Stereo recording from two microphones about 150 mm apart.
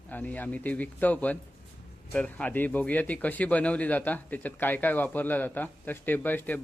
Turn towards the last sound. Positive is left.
turn(degrees=10)  # may be behind; listen again after turning